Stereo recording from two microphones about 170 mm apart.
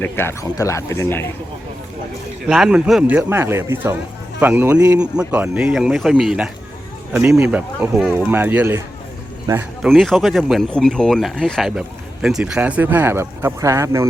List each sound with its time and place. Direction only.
0.0 s speech: 15° left (ahead or behind)
2.5 s speech: 5° right (ahead or behind); by 9.6 s 20° right (ahead or behind)
9.8 s speech: centre (ahead or behind); by 14.1 s 15° right (ahead or behind)